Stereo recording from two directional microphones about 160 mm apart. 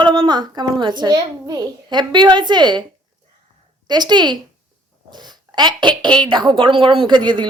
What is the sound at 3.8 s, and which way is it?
A woman's voice, 25° right (ahead or behind).